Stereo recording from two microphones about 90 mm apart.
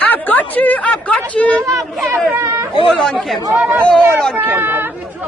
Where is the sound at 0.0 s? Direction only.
20° left (ahead or behind).